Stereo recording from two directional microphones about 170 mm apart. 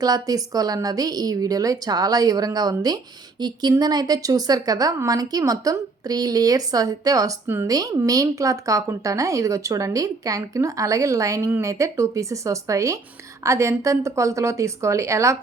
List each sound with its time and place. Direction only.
0.0 s a woman's voice: 20° right (ahead or behind)